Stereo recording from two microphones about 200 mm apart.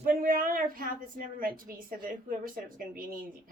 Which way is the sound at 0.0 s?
45° right (ahead or behind).